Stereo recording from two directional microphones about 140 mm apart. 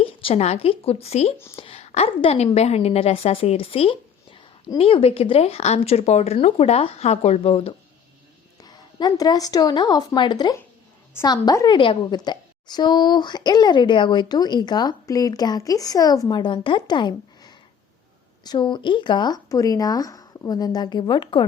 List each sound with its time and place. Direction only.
0.0 s speech: 40° left (ahead or behind)
8.6 s a woman's voice: 30° left (ahead or behind)